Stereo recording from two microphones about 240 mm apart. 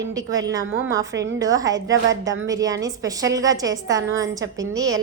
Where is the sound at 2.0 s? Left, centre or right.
Right.